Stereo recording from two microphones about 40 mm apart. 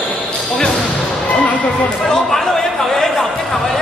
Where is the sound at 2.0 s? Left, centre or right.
Centre.